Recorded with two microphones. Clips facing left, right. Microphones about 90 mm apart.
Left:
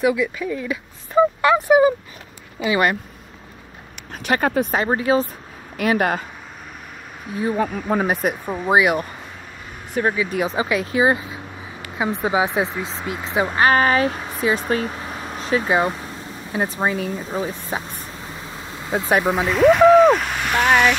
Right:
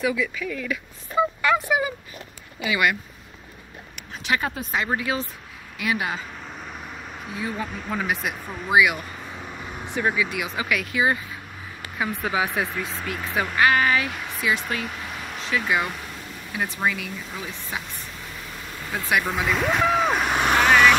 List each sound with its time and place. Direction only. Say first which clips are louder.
0.0 s speech: left 5 dB; 20° left (ahead or behind)
1.5 s speech: left 8 dB; 35° left (ahead or behind)
4.1 s speech: left 5 dB; 50° left (ahead or behind)
4.5 s speech: left 11 dB; 65° left (ahead or behind)
4.7 s speech: left 3 dB; 30° left (ahead or behind)
5.8 s speech: left 7 dB; 50° left (ahead or behind)
7.5 s speech: left 11 dB; 50° left (ahead or behind); by 13.6 s 25° left (ahead or behind)
13.6 s speech: left 3 dB; 35° left (ahead or behind)
19.3 s speech: left 8 dB; centre (ahead or behind)
20.2 s vehicle: right 3 dB; 20° right (ahead or behind)